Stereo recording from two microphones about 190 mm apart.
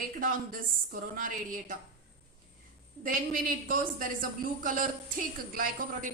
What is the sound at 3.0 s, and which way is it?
A man's voice, 45° right (ahead or behind).